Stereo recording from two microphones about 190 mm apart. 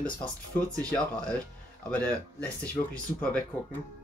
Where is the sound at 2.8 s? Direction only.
25° left (ahead or behind).